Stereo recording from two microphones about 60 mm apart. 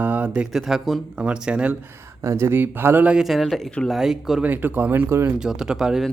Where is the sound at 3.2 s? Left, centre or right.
Centre.